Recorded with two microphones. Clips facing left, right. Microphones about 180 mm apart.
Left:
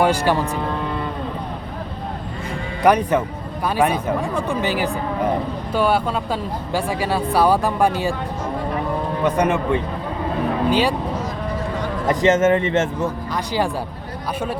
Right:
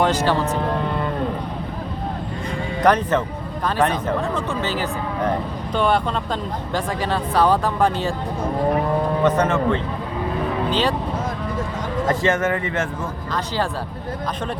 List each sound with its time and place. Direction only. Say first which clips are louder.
0.0 s speech: left 1 dB; 10° left (ahead or behind)
2.8 s speech: left 2 dB; 10° left (ahead or behind)
4.4 s speech: left 3 dB; 15° left (ahead or behind)
9.2 s speech: left 1 dB; 15° left (ahead or behind)
12.0 s speech: left 5 dB; 20° left (ahead or behind)